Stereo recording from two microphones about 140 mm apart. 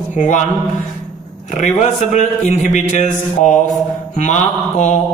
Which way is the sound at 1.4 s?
60° left (ahead or behind).